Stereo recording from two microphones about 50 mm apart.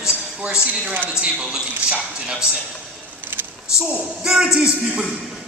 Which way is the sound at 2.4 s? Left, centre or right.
Left.